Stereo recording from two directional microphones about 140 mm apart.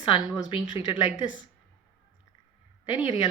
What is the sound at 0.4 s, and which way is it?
Speech, 35° left (ahead or behind).